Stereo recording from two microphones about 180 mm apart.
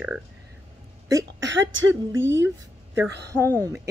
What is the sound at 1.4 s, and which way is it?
Speech, 90° right.